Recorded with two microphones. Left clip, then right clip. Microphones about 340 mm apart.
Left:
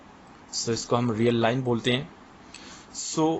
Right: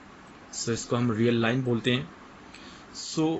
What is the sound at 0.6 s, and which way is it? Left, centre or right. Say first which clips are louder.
Speech: left 3 dB; centre.